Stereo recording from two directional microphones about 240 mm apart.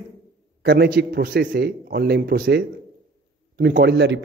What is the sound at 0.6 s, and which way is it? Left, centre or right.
A man's voice, right.